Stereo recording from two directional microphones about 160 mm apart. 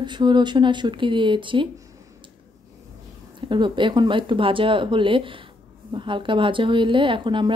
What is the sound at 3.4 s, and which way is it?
Speech, 30° right (ahead or behind).